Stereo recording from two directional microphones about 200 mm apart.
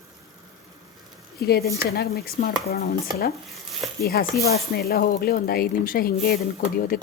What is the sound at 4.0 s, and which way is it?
A woman's voice, 50° left (ahead or behind).